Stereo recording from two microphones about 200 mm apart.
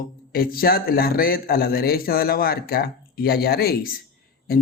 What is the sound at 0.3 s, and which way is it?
Speech, 50° left (ahead or behind).